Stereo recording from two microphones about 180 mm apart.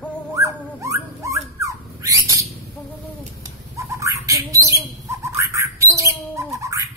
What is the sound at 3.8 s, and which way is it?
Bird, 15° right (ahead or behind).